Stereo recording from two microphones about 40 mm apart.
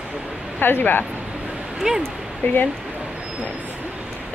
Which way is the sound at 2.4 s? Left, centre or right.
Left.